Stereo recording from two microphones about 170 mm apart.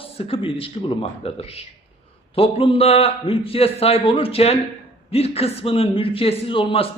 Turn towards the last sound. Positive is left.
turn(degrees=30)  # may be behind; listen again after turning